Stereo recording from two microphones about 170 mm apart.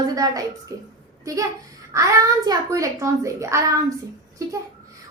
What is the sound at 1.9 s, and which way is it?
A child's voice, 20° right (ahead or behind).